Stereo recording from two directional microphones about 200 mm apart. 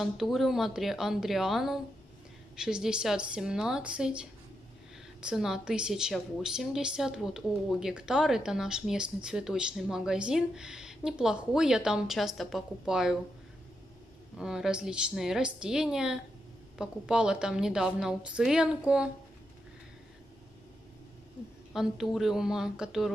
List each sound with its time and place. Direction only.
0.0 s a woman's voice: centre (ahead or behind)
14.3 s a woman's voice: 5° right (ahead or behind)
21.7 s a woman's voice: centre (ahead or behind)